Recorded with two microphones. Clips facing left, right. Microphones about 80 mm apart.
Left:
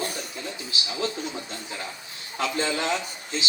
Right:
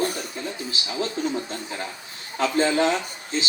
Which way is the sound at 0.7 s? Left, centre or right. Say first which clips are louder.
Left 1 dB; right.